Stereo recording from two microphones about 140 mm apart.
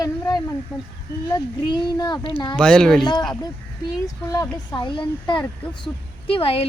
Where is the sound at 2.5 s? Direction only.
5° left (ahead or behind).